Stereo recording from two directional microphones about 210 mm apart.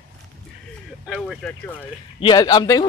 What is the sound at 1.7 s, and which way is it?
Speech, 20° left (ahead or behind).